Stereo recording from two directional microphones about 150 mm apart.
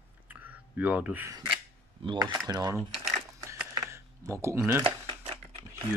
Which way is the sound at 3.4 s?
15° right (ahead or behind).